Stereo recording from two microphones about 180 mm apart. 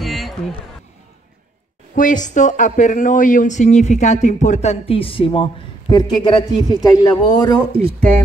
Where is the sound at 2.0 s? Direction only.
45° left (ahead or behind); by 7.6 s 20° left (ahead or behind).